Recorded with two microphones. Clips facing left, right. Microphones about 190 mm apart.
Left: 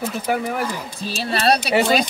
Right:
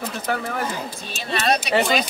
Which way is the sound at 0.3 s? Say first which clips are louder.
Left 3 dB; 15° left (ahead or behind).